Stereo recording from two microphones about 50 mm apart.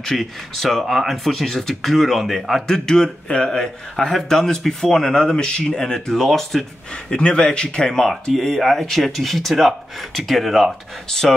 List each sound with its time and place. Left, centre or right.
0.0 s a man's voice: centre
7.1 s a man's voice: centre